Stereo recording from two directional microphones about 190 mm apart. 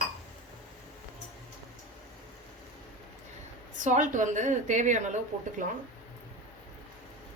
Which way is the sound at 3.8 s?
40° right (ahead or behind).